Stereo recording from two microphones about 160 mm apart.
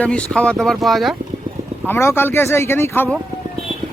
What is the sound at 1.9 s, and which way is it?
Speech, 15° left (ahead or behind).